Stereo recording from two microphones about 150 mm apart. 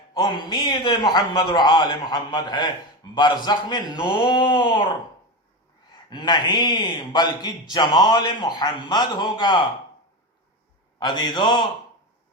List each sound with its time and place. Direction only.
0.1 s a man's voice: 30° left (ahead or behind)
6.1 s a man's voice: 30° left (ahead or behind)
11.0 s a man's voice: 30° left (ahead or behind)